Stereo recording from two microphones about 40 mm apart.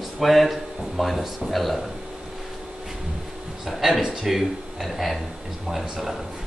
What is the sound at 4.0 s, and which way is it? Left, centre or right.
Speech, centre.